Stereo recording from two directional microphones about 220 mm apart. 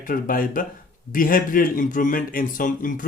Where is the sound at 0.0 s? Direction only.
40° left (ahead or behind).